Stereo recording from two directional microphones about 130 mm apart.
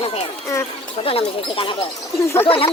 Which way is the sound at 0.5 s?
20° left (ahead or behind).